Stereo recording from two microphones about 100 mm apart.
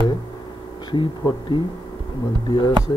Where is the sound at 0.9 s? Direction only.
50° left (ahead or behind).